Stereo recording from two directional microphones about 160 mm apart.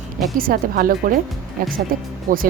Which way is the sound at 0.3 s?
65° right (ahead or behind).